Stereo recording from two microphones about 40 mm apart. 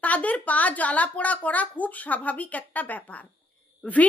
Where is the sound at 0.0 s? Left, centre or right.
Left.